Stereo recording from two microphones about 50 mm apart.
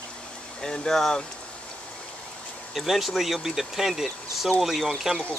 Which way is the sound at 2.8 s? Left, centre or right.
Centre.